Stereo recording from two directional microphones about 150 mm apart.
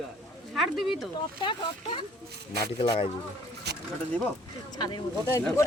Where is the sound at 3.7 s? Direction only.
90° right.